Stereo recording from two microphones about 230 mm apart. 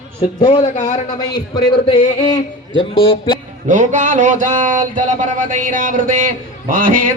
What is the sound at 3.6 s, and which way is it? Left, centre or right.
Speech, right.